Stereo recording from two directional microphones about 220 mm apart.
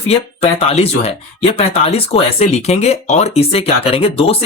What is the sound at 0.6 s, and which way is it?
Speech, 30° left (ahead or behind).